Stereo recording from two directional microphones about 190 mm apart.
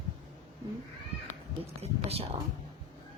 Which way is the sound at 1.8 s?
30° right (ahead or behind).